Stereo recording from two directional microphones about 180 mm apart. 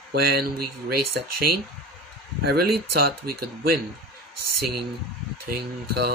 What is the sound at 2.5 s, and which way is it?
Mantra, 60° right (ahead or behind).